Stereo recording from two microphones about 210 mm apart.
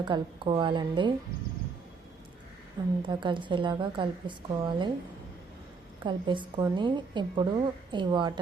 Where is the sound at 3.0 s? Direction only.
20° right (ahead or behind).